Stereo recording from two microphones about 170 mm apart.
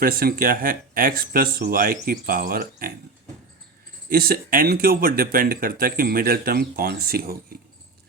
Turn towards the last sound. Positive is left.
turn(degrees=-60)  # may be behind; listen again after turning